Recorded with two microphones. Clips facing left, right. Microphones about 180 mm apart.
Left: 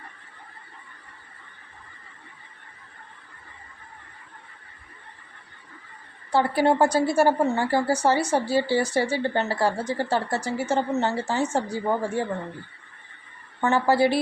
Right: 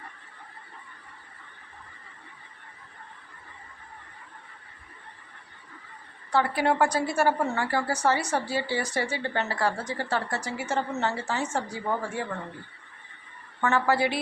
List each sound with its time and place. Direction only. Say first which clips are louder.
6.3 s a woman's voice: left 4 dB; 30° left (ahead or behind)
13.6 s speech: left 4 dB; 30° left (ahead or behind)